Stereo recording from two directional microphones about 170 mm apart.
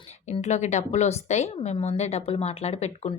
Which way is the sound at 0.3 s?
40° left (ahead or behind).